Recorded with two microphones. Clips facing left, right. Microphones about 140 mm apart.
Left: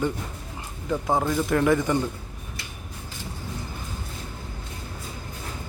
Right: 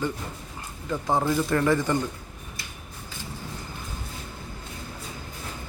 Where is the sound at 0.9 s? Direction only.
5° left (ahead or behind).